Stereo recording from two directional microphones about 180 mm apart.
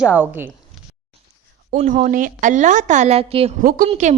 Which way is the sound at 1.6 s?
45° right (ahead or behind).